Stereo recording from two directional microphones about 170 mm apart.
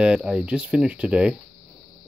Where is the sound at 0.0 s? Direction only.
5° right (ahead or behind).